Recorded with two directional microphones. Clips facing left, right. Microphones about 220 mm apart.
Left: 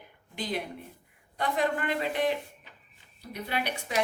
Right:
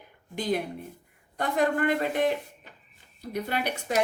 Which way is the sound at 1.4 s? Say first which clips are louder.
Right 4 dB; 45° right (ahead or behind).